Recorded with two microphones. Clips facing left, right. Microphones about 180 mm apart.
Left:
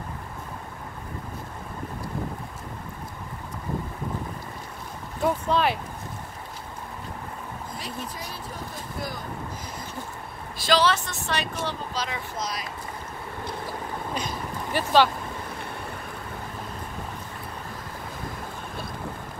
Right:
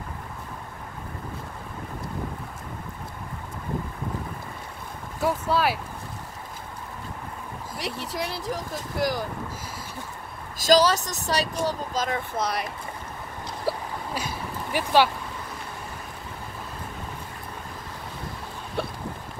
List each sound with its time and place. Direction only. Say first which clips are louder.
5.2 s speech: even; 5° right (ahead or behind)
7.7 s speech: right 6 dB; 75° right (ahead or behind)
10.6 s speech: right 3 dB; 40° right (ahead or behind); by 12.6 s 60° right (ahead or behind)
13.7 s a sound: right 8 dB; 70° right (ahead or behind)
14.1 s vehicle: even; 10° right (ahead or behind)